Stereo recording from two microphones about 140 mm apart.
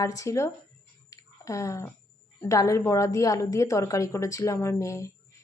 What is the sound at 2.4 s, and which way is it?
Speech, 20° left (ahead or behind).